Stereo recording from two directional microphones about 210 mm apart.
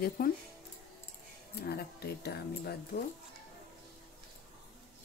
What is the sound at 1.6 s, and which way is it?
Speech, 50° left (ahead or behind).